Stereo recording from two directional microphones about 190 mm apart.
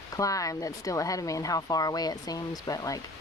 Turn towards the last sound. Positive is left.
turn(degrees=20)  # may be behind; listen again after turning